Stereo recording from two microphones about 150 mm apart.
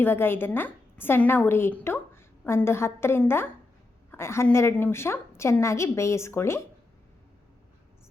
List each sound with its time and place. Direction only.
0.0 s a woman's voice: 15° left (ahead or behind)